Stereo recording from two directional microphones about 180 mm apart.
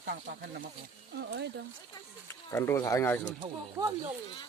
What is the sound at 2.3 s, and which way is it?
Speech, 15° left (ahead or behind).